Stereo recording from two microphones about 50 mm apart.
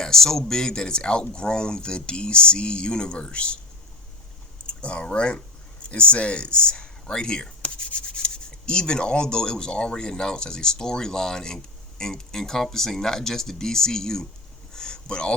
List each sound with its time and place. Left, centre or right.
0.0 s speech: centre
4.8 s speech: left
14.7 s a sound: centre